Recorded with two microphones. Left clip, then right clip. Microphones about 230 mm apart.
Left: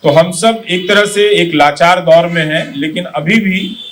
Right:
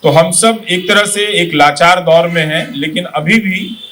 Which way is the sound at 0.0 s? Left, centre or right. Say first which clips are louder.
Even; right.